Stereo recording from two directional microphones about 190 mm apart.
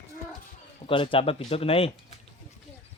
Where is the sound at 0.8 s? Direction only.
30° left (ahead or behind).